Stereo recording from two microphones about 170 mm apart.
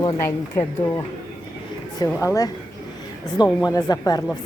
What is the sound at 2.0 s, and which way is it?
A woman's voice, 20° left (ahead or behind).